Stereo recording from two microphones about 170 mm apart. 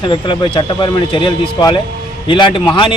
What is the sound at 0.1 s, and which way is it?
Speech, 30° left (ahead or behind).